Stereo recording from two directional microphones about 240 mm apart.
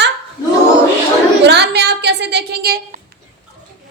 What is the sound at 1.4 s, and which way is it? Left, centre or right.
A woman's voice, right.